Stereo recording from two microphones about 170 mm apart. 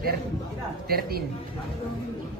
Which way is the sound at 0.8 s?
65° right (ahead or behind).